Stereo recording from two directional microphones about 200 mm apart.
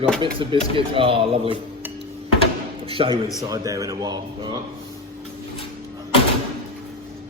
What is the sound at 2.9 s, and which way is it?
Speech, 25° right (ahead or behind).